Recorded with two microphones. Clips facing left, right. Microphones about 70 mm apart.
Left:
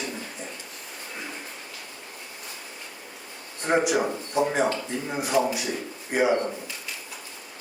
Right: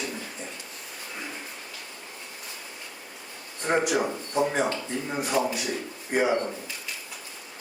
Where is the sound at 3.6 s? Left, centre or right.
Centre.